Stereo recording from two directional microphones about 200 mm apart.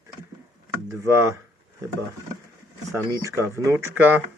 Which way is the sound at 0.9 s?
15° right (ahead or behind).